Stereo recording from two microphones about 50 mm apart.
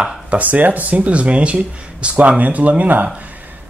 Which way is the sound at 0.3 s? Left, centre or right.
Right.